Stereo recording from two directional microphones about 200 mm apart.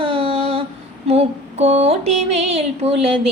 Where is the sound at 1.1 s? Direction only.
30° right (ahead or behind).